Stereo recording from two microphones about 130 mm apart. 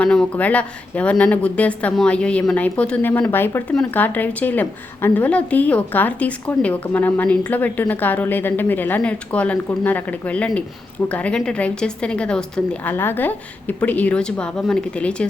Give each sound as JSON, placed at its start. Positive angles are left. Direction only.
{"t": 0.0, "sound": "a woman's voice", "side_deg": 5}